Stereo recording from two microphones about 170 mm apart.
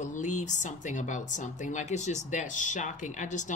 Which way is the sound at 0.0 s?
45° left (ahead or behind).